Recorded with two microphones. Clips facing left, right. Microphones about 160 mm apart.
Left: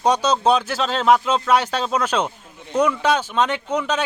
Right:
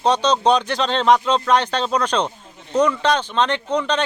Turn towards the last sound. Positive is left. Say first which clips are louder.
# right 2 dB
turn(degrees=5)  # may be behind; listen again after turning